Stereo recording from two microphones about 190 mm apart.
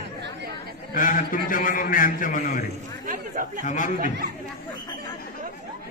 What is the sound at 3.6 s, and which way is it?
Speech, 40° left (ahead or behind).